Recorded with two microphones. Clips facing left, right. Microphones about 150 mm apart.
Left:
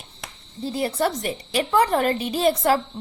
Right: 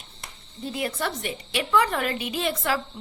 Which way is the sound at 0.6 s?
35° left (ahead or behind).